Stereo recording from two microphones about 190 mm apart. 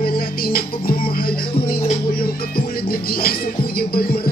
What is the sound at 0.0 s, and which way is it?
Music, 50° left (ahead or behind).